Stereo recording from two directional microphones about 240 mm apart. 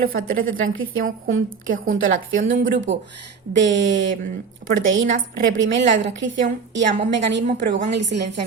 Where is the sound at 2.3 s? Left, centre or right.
Right.